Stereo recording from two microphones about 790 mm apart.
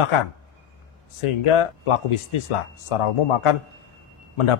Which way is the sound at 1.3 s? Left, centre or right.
Left.